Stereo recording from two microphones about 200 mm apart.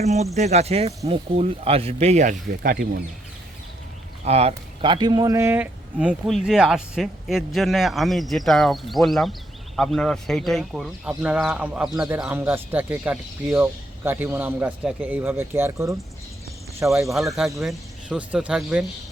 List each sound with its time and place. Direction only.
0.0 s speech: 35° right (ahead or behind)
4.3 s speech: 30° right (ahead or behind); by 18.9 s 5° right (ahead or behind)